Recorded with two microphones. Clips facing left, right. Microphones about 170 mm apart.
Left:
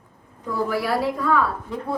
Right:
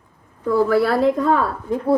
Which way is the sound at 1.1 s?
45° right (ahead or behind).